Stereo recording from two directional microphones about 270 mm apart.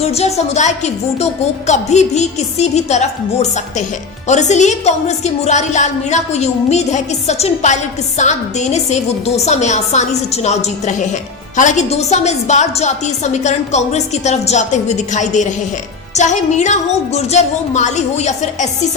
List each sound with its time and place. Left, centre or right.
0.0 s a woman's voice: left
4.3 s a woman's voice: left